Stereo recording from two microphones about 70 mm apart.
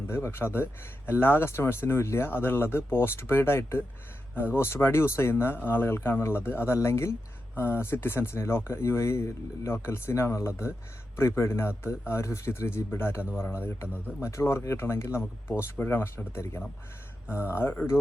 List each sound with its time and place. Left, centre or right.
0.1 s speech: left